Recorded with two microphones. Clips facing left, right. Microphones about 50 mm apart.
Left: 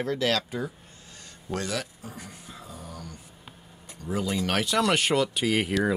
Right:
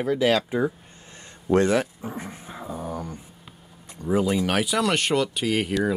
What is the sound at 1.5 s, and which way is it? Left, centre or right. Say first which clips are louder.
Dog: right 11 dB; right.